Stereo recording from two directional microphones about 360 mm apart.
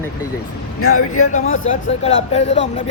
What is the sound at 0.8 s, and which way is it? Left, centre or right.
Speech, left.